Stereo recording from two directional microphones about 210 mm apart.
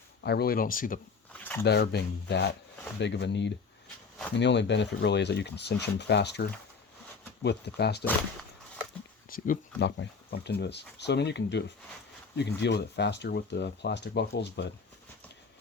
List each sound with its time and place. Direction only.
0.2 s speech: 50° left (ahead or behind)
1.3 s a sound: 5° left (ahead or behind)
1.6 s speech: 50° left (ahead or behind)
8.0 s dog: 5° left (ahead or behind)
9.3 s a sound: 45° left (ahead or behind)
9.8 s speech: 55° left (ahead or behind)